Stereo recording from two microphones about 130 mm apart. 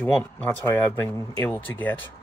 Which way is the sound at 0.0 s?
10° left (ahead or behind).